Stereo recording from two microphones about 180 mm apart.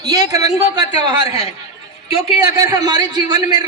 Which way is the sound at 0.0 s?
20° right (ahead or behind).